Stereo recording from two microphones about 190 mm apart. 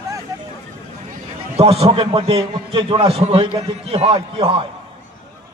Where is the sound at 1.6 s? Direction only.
30° right (ahead or behind).